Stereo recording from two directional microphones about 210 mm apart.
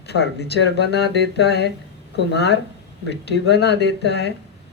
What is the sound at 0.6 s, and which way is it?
Speech, 50° left (ahead or behind).